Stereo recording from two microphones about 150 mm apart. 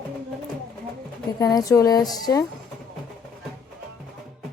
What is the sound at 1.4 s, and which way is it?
Speech, 25° left (ahead or behind).